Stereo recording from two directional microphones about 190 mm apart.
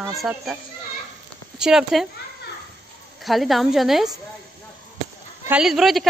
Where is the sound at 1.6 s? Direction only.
5° right (ahead or behind).